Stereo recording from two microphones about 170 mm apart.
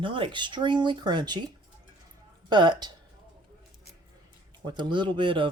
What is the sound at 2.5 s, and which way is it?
Speech, 25° right (ahead or behind).